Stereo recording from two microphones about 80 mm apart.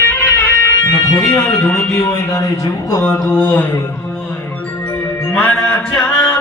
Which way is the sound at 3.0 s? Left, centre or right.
Centre.